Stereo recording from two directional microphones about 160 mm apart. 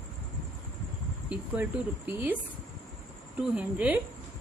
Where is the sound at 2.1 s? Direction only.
10° right (ahead or behind).